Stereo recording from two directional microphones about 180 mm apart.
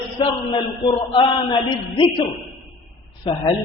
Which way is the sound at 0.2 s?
30° left (ahead or behind).